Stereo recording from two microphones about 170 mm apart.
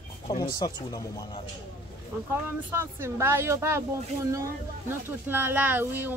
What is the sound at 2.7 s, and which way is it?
Speech, 15° right (ahead or behind).